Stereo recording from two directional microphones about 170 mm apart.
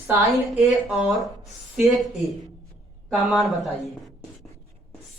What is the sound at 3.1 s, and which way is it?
Speech, centre (ahead or behind).